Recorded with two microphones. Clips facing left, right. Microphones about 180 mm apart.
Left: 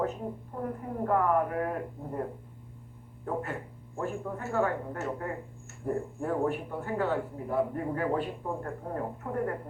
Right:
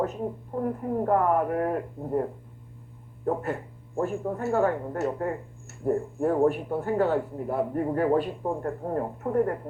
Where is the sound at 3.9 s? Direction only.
40° right (ahead or behind).